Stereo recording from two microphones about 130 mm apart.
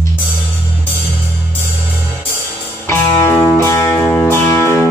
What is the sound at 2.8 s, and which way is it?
Music, 20° left (ahead or behind).